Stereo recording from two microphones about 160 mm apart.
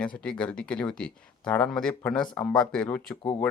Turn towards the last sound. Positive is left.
turn(degrees=5)  # may be behind; listen again after turning